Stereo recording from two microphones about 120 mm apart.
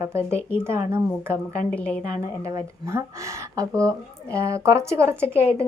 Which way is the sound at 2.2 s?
30° right (ahead or behind).